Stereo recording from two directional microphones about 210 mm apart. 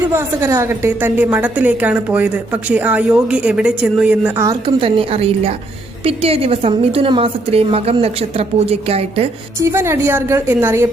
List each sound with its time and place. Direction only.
0.1 s a woman's voice: 15° right (ahead or behind)
4.4 s a woman's voice: 25° right (ahead or behind)
9.6 s a woman's voice: 15° right (ahead or behind)